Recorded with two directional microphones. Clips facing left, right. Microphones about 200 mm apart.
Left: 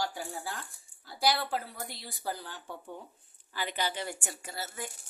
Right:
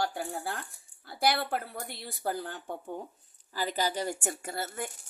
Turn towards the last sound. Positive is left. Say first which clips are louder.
# right 4 dB
turn(degrees=-55)  # may be behind; listen again after turning